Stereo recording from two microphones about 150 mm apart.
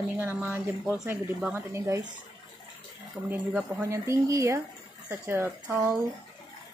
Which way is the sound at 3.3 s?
10° right (ahead or behind).